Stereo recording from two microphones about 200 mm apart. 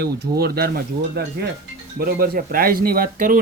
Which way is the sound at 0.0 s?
50° right (ahead or behind).